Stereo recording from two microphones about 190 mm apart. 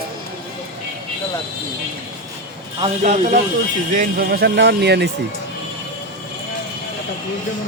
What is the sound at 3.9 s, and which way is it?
Speech, 50° right (ahead or behind).